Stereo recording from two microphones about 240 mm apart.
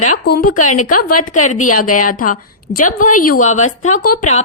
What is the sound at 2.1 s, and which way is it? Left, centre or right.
A woman's voice, left.